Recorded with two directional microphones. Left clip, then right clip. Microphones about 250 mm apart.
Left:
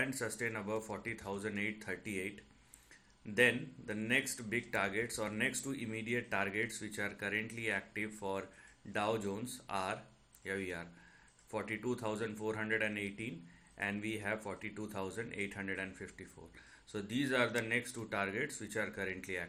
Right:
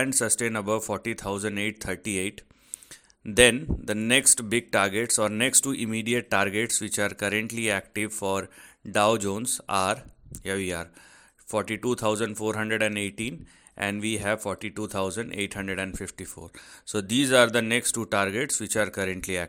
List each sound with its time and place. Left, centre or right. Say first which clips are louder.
0.3 s a man's voice: right 12 dB; right
3.3 s a man's voice: right 12 dB; right